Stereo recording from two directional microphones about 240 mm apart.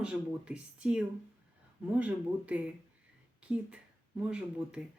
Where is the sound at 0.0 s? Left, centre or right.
Centre.